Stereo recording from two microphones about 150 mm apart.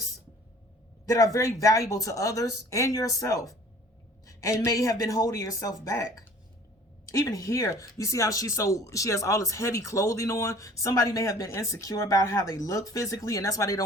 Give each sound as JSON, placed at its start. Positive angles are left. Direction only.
{"t": 1.0, "sound": "speech", "side_deg": 20}